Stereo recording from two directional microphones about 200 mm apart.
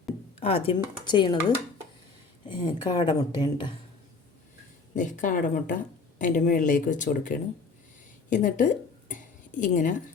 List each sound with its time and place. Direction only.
0.3 s a woman's voice: 30° left (ahead or behind)
4.9 s speech: 40° left (ahead or behind)
8.3 s a sound: 40° left (ahead or behind)